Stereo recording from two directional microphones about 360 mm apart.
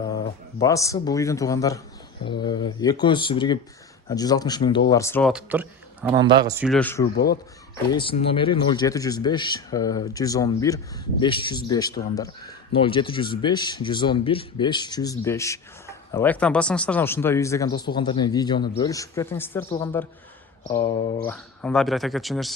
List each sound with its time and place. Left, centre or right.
0.6 s speech: centre
7.0 s a man's voice: left
7.9 s speech: centre